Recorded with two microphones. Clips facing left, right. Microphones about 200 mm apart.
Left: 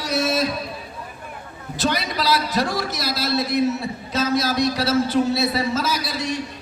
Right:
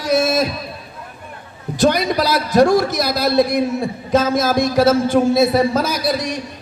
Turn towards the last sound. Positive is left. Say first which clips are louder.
# right 6 dB
turn(degrees=-50)  # may be behind; listen again after turning